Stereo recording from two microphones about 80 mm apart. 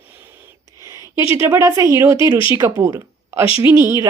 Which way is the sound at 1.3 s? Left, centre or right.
Right.